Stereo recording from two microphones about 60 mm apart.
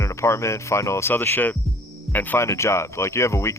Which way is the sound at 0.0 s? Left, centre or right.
Left.